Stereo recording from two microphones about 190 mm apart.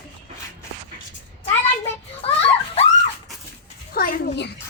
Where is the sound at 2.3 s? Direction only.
30° left (ahead or behind).